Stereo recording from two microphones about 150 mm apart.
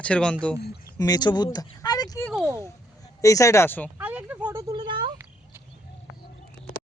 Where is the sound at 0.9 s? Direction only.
25° left (ahead or behind).